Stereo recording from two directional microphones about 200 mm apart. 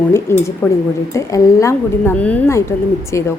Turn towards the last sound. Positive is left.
turn(degrees=15)  # may be behind; listen again after turning